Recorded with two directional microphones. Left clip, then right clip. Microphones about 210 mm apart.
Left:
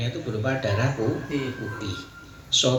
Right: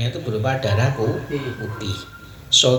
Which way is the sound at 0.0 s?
50° right (ahead or behind).